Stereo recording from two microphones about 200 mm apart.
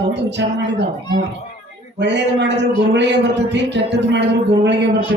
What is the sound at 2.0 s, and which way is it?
A man's voice, 60° right (ahead or behind).